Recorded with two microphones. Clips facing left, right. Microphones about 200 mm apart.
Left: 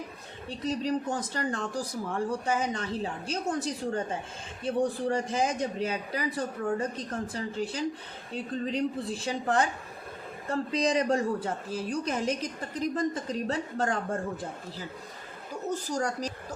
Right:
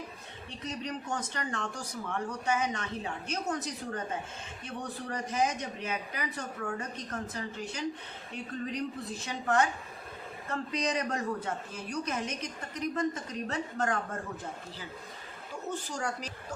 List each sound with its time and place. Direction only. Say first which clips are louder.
0.6 s a woman's voice: left 9 dB; 35° left (ahead or behind)
15.9 s a woman's voice: left 6 dB; 40° left (ahead or behind)